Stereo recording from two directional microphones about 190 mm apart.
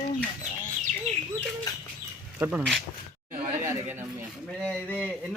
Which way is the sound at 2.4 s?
5° right (ahead or behind).